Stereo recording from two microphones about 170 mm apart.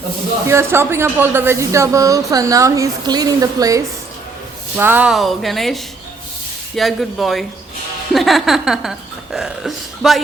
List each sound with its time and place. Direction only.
0.4 s speech: 15° right (ahead or behind)